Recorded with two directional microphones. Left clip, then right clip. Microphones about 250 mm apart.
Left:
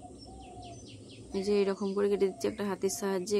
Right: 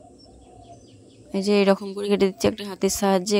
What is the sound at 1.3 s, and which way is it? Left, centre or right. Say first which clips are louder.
Speech: right 10 dB; right.